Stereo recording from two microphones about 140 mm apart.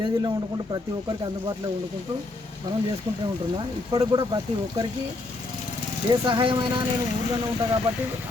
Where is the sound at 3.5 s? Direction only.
30° right (ahead or behind).